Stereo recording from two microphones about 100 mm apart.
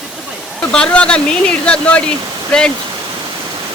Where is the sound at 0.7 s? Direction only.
10° left (ahead or behind).